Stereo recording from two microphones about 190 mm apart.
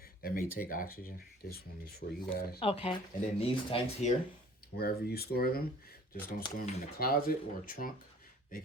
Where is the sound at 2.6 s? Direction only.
30° left (ahead or behind).